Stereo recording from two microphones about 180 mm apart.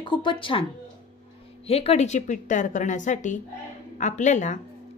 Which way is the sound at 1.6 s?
35° left (ahead or behind).